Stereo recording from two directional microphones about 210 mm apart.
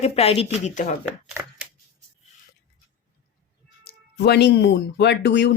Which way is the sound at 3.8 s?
50° left (ahead or behind).